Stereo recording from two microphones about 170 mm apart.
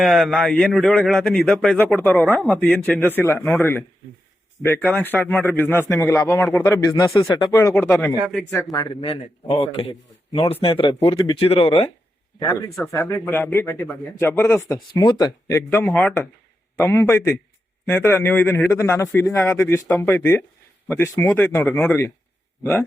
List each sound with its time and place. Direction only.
0.0 s a man's voice: centre (ahead or behind)
8.7 s a man's voice: 25° left (ahead or behind)
9.9 s speech: 20° left (ahead or behind)
10.5 s a man's voice: 35° left (ahead or behind)
12.4 s a man's voice: 20° left (ahead or behind)
14.8 s a man's voice: 25° left (ahead or behind)